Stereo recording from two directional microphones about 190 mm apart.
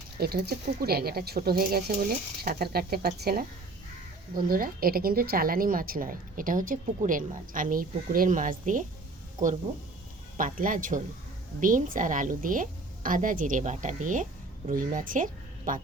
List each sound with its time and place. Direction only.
0.2 s a woman's voice: 55° right (ahead or behind)